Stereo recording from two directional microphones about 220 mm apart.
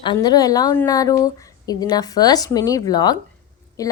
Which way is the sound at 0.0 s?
20° left (ahead or behind).